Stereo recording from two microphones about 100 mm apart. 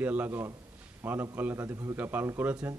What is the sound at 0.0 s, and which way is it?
A man's voice, 15° right (ahead or behind).